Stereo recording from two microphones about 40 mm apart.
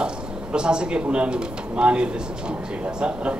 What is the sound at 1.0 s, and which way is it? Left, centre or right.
A man's voice, right.